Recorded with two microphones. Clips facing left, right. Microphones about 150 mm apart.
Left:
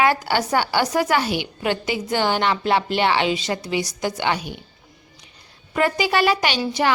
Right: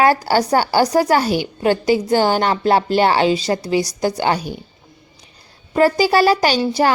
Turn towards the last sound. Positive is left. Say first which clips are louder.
# right 5 dB
turn(degrees=-35)  # may be behind; listen again after turning